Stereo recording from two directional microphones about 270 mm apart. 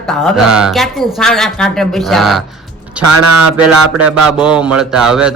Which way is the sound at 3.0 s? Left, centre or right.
Right.